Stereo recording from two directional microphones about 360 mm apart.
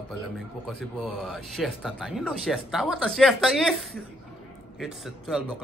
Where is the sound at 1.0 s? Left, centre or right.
Centre.